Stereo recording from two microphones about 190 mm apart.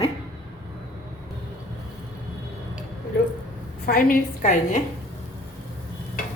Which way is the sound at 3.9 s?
50° left (ahead or behind).